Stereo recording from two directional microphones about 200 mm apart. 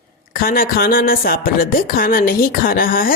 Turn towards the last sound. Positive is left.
turn(degrees=45)  # may be behind; listen again after turning